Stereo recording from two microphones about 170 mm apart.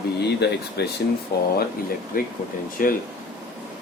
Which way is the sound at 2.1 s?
55° left (ahead or behind).